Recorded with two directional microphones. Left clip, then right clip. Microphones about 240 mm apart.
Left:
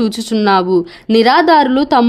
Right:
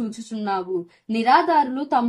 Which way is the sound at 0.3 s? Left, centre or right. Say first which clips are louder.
Left 13 dB; left.